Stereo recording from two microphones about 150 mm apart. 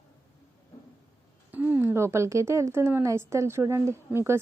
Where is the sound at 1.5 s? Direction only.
10° right (ahead or behind).